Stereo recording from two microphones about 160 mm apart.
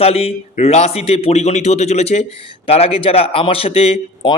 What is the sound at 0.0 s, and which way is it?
A man's voice, 40° left (ahead or behind).